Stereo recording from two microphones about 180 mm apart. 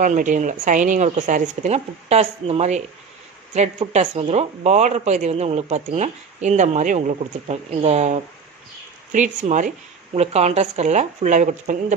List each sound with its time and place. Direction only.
0.0 s speech: 45° right (ahead or behind)